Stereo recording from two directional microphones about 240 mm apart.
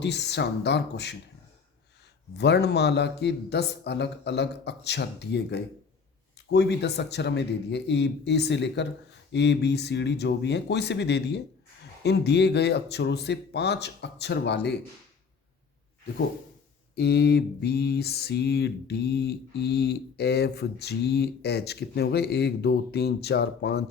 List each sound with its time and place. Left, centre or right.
0.0 s mantra: left
2.4 s mantra: left
16.9 s mantra: left